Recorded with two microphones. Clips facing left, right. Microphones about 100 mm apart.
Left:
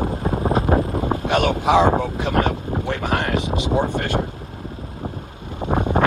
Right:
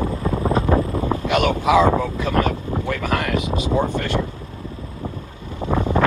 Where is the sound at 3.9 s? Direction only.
45° left (ahead or behind).